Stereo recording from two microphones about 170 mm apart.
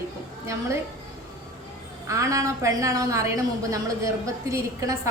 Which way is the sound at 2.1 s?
20° right (ahead or behind).